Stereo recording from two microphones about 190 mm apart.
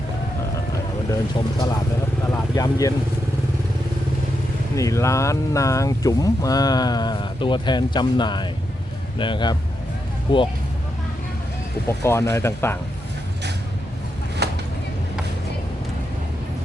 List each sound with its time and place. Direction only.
1.1 s speech: 20° left (ahead or behind)
4.8 s speech: 15° left (ahead or behind)
11.9 s speech: 15° left (ahead or behind)
14.4 s a sound: 60° right (ahead or behind)